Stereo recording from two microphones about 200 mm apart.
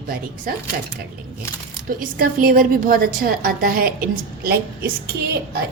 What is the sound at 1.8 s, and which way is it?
A woman's voice, 45° right (ahead or behind).